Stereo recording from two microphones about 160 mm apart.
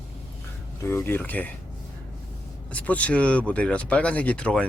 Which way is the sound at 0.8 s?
15° left (ahead or behind).